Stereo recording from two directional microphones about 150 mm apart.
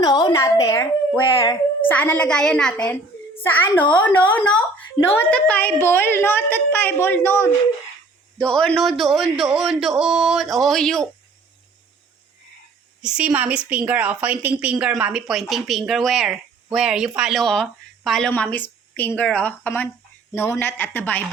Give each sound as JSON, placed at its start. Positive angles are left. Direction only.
{"t": 0.0, "sound": "a sound", "side_deg": 25}
{"t": 0.5, "sound": "speech", "side_deg": 20}
{"t": 1.8, "sound": "a woman's voice", "side_deg": 10}
{"t": 13.0, "sound": "a woman's voice", "side_deg": -5}